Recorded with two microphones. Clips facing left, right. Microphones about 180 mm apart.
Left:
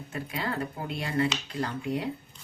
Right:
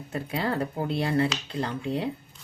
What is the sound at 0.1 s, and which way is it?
Speech, 35° right (ahead or behind).